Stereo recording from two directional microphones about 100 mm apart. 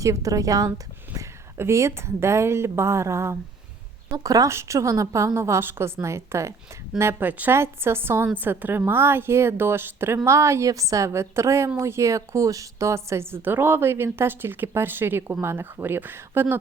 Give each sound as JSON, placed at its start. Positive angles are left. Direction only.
{"t": 0.0, "sound": "a woman's voice", "side_deg": -35}